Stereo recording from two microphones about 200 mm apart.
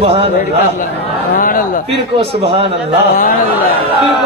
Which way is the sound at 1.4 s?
45° left (ahead or behind).